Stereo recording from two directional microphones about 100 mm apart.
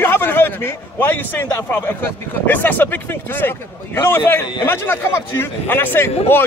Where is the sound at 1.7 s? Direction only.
20° left (ahead or behind).